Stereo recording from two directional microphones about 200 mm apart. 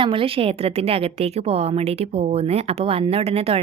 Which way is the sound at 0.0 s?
25° right (ahead or behind).